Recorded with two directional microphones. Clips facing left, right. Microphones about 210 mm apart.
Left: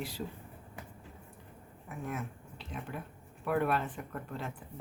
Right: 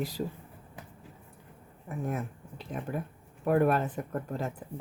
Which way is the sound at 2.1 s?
40° right (ahead or behind).